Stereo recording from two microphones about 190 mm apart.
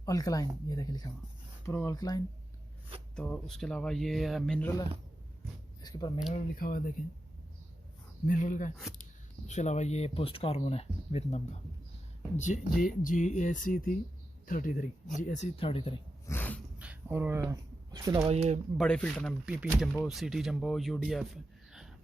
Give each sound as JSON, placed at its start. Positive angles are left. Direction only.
{"t": 0.0, "sound": "speech", "side_deg": 20}
{"t": 3.2, "sound": "speech", "side_deg": 5}
{"t": 5.8, "sound": "speech", "side_deg": 20}
{"t": 6.3, "sound": "speech", "side_deg": 45}
{"t": 8.3, "sound": "speech", "side_deg": 45}
{"t": 12.8, "sound": "speech", "side_deg": 45}
{"t": 16.2, "sound": "dog", "side_deg": 10}
{"t": 16.7, "sound": "a sound", "side_deg": -5}
{"t": 18.3, "sound": "speech", "side_deg": -35}
{"t": 18.8, "sound": "speech", "side_deg": 5}
{"t": 21.7, "sound": "a sound", "side_deg": 0}